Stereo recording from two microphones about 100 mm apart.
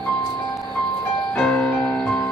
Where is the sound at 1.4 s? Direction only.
15° left (ahead or behind).